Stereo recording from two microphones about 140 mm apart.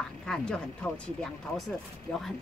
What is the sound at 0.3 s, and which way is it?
Speech, 5° left (ahead or behind).